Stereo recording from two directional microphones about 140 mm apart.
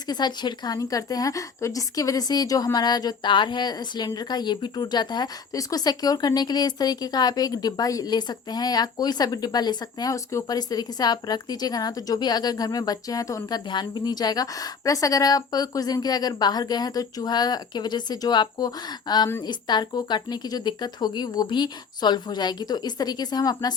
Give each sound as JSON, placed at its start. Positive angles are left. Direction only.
{"t": 0.1, "sound": "a woman's voice", "side_deg": 30}